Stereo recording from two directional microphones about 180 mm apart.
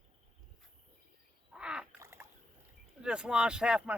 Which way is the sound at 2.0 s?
15° right (ahead or behind).